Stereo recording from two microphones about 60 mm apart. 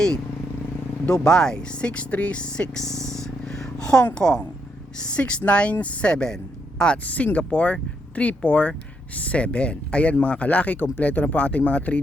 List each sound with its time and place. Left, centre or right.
1.1 s speech: centre
3.1 s a sound: centre
4.1 s speech: centre